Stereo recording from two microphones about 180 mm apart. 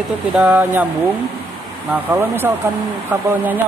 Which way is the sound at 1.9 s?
10° right (ahead or behind).